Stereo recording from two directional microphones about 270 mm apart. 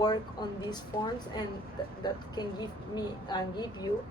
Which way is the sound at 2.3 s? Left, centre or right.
Centre.